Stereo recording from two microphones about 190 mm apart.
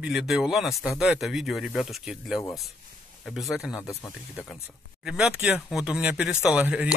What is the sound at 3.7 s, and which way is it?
Speech, 15° left (ahead or behind).